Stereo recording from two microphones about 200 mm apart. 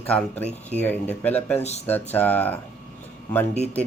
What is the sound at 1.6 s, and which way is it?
Speech, 35° left (ahead or behind).